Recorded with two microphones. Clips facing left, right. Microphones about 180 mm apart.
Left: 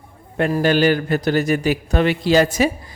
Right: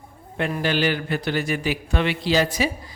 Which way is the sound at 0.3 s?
45° left (ahead or behind).